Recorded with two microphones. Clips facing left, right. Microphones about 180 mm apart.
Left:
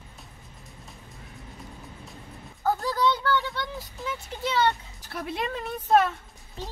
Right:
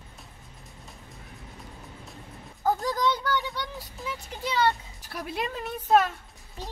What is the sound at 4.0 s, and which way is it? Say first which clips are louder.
Speech: left 2 dB; centre (ahead or behind).